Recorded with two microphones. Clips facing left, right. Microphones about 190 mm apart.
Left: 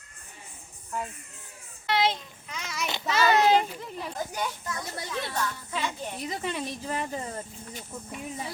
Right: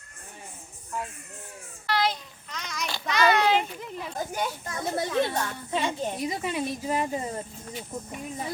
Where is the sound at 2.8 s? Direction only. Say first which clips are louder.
Left 2 dB; 20° left (ahead or behind).